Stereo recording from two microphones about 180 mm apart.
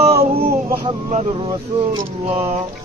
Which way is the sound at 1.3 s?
25° right (ahead or behind).